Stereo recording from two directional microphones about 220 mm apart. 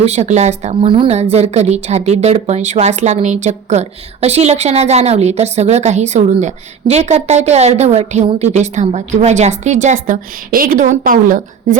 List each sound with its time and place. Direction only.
0.0 s a woman's voice: 30° right (ahead or behind)